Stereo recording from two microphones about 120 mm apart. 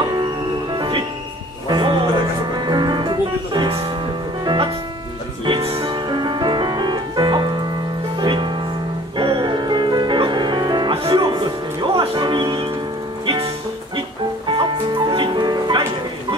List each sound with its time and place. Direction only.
0.7 s music: 40° right (ahead or behind)
14.5 s music: 40° right (ahead or behind)